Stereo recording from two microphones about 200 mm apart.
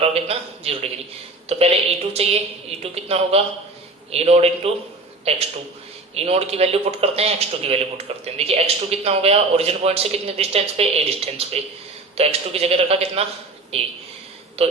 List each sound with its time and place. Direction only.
0.0 s speech: 30° right (ahead or behind)